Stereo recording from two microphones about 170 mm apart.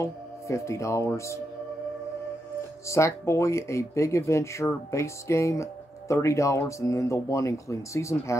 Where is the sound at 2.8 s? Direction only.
15° left (ahead or behind).